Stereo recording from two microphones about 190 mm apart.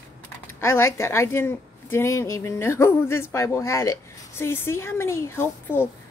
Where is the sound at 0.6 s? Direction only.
15° left (ahead or behind).